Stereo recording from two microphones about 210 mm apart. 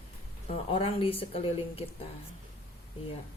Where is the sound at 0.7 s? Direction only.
25° left (ahead or behind).